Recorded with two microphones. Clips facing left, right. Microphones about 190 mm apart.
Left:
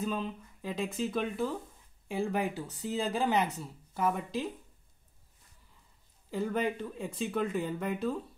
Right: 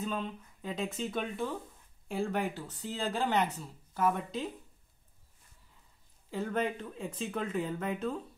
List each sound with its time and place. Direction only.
0.0 s speech: 5° left (ahead or behind)
6.3 s speech: centre (ahead or behind)